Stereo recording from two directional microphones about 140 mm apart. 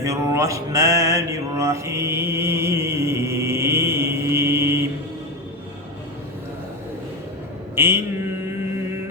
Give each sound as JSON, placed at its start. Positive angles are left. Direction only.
{"t": 0.0, "sound": "mantra", "side_deg": -20}
{"t": 7.8, "sound": "mantra", "side_deg": -15}